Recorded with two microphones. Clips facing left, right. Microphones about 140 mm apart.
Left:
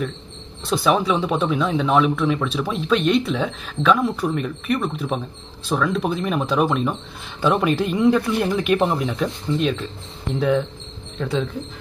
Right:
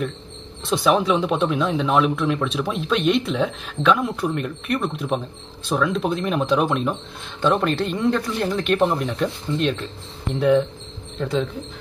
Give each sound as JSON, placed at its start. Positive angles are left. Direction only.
{"t": 0.7, "sound": "speech", "side_deg": 0}
{"t": 11.1, "sound": "speech", "side_deg": 0}